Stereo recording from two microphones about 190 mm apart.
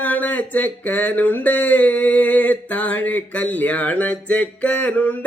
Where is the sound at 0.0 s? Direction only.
10° left (ahead or behind).